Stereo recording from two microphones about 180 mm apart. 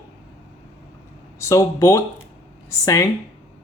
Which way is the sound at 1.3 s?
15° left (ahead or behind).